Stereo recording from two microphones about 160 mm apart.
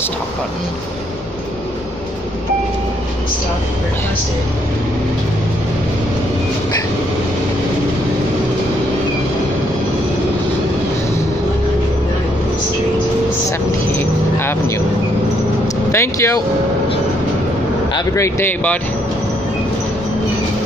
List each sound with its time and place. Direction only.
15.9 s speech: 15° left (ahead or behind)
17.9 s speech: 20° left (ahead or behind)